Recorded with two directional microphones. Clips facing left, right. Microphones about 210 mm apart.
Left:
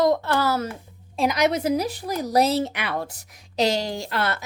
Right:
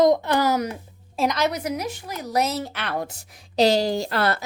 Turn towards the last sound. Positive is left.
turn(degrees=-35)  # may be behind; listen again after turning